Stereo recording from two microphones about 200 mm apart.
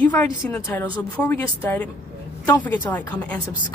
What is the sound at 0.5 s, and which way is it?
A woman's voice, 10° left (ahead or behind).